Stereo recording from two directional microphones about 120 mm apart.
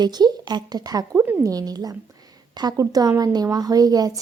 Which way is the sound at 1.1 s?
20° right (ahead or behind).